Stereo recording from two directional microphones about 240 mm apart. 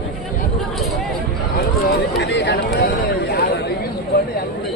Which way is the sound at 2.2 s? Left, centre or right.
Left.